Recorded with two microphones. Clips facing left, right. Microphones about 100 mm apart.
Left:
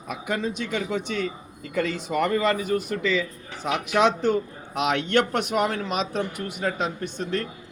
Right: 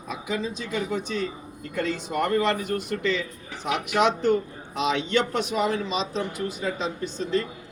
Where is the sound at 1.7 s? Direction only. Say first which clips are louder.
Left 2 dB; 90° left.